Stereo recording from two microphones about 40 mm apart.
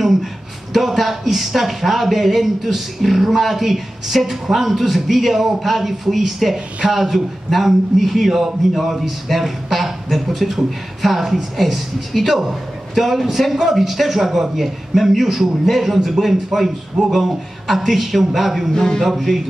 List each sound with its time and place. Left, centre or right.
0.7 s a man's voice: centre
18.7 s speech: centre
18.9 s a man's voice: centre